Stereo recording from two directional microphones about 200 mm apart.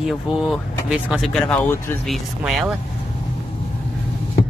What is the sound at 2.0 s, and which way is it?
Speech, centre (ahead or behind).